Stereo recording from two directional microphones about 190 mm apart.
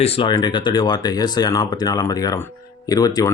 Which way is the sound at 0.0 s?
30° left (ahead or behind).